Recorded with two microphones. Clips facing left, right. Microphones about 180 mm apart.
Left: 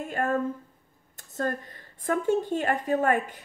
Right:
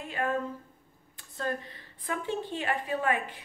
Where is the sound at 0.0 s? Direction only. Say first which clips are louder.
Left 4 dB; 45° left (ahead or behind).